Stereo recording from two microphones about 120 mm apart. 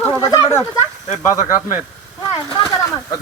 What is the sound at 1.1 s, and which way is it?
Speech, 20° right (ahead or behind).